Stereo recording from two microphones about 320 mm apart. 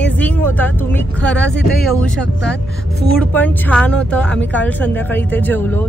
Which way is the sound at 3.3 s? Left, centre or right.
Centre.